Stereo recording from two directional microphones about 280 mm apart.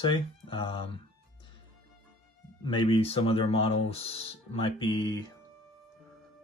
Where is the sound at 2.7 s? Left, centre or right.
Centre.